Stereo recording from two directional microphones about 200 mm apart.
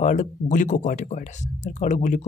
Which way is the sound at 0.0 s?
40° left (ahead or behind).